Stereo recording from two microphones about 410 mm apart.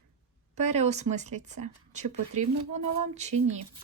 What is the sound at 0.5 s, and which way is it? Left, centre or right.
Speech, centre.